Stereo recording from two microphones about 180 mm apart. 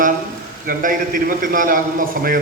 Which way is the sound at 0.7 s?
50° right (ahead or behind).